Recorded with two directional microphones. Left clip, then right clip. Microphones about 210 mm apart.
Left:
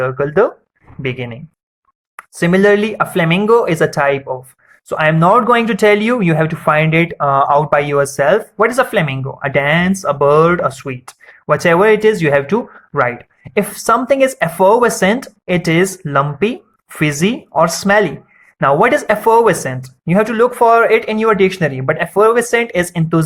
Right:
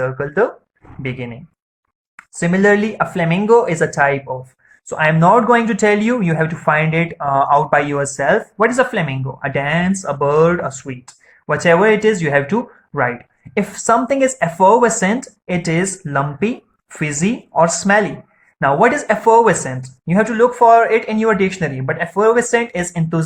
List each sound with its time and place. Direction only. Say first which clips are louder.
0.0 s speech: left 4 dB; 40° left (ahead or behind)